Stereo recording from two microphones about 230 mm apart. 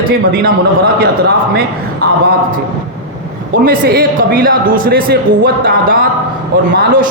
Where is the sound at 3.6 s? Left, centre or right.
Right.